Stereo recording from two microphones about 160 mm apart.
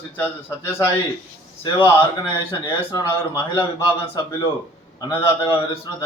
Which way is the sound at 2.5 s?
25° left (ahead or behind).